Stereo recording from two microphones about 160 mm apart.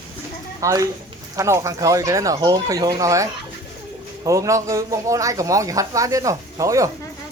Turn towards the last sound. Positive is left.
turn(degrees=-20)  # may be behind; listen again after turning